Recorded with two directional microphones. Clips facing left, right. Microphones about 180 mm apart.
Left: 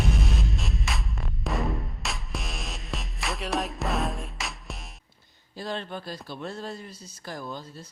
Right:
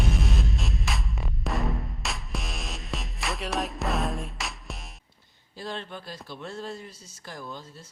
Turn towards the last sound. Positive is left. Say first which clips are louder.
# left 3 dB
turn(degrees=35)  # may be behind; listen again after turning